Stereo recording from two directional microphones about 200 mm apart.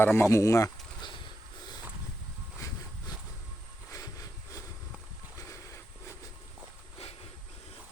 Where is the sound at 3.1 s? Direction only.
20° left (ahead or behind).